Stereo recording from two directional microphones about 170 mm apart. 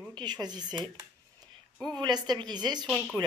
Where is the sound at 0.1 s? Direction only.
25° right (ahead or behind).